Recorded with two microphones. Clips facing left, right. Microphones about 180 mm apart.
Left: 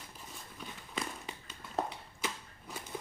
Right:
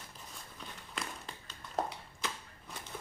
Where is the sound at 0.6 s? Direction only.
5° left (ahead or behind).